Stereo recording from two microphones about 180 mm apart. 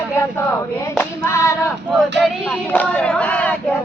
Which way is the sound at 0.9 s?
15° left (ahead or behind).